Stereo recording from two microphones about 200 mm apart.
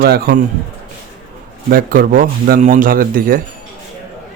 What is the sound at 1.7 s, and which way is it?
Speech, 45° right (ahead or behind).